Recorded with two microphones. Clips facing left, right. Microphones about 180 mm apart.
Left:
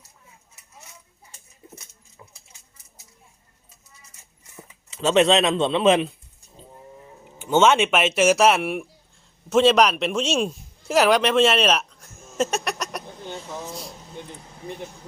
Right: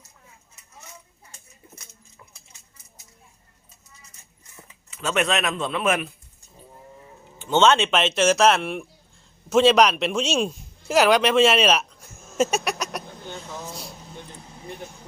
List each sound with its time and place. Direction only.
4.9 s a man's voice: 25° left (ahead or behind)
7.3 s a man's voice: 10° left (ahead or behind)